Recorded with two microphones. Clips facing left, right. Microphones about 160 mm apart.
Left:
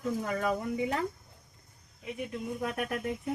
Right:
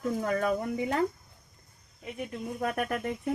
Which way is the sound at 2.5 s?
50° right (ahead or behind).